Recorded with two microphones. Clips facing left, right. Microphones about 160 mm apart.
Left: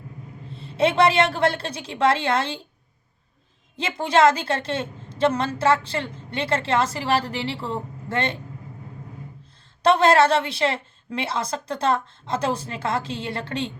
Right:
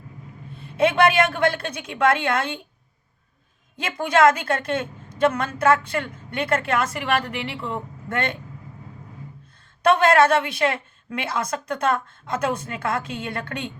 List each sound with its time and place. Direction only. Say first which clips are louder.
0.7 s a woman's voice: even; 30° left (ahead or behind)
3.8 s a woman's voice: even; 25° left (ahead or behind)
9.8 s a woman's voice: even; 30° left (ahead or behind)